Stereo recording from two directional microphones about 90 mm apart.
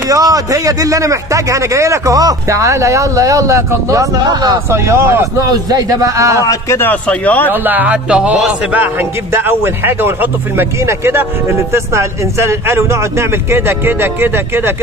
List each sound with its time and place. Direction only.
0.1 s speech: 40° right (ahead or behind)
4.6 s speech: 30° right (ahead or behind)
5.5 s speech: 45° right (ahead or behind)
6.4 s speech: 40° left (ahead or behind)
6.8 s a man's voice: 15° left (ahead or behind)
7.5 s speech: 20° right (ahead or behind)